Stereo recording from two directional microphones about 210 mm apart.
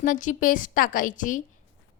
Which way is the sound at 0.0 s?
40° left (ahead or behind).